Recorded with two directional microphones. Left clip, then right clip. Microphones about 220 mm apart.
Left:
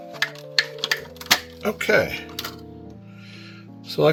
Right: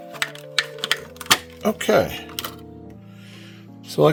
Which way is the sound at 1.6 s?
45° right (ahead or behind).